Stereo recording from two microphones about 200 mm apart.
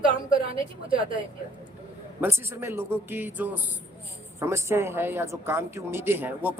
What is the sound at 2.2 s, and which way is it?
Speech, 10° right (ahead or behind).